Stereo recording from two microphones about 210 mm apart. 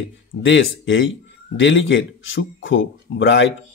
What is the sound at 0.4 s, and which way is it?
Speech, 65° left (ahead or behind).